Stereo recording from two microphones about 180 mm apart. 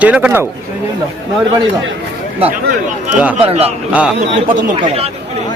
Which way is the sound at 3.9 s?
5° right (ahead or behind).